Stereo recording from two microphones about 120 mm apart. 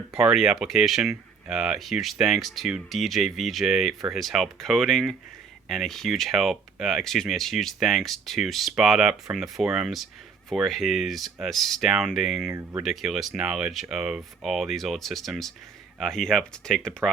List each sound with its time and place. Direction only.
0.1 s speech: 5° right (ahead or behind)
12.5 s speech: 15° right (ahead or behind)
12.8 s speech: centre (ahead or behind)